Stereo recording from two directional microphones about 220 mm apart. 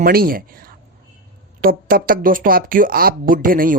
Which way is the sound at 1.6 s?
40° right (ahead or behind).